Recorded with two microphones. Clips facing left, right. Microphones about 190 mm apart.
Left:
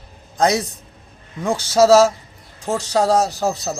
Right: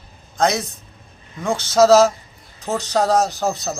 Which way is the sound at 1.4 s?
15° left (ahead or behind).